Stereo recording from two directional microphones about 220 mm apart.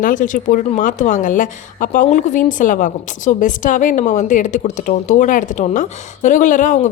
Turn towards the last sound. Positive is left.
turn(degrees=35)  # may be behind; listen again after turning